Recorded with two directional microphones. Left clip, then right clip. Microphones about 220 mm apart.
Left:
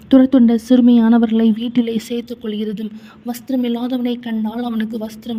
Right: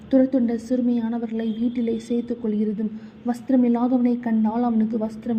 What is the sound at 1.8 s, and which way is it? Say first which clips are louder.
Speech: left 1 dB; 60° left (ahead or behind).